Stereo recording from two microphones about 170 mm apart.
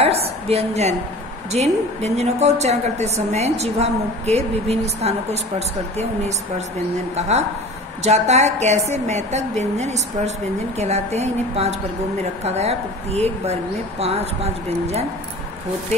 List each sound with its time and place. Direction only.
0.0 s a woman's voice: 35° right (ahead or behind)
7.2 s a woman's voice: 40° right (ahead or behind)